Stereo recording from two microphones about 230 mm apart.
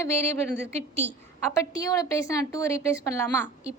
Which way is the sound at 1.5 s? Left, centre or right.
Centre.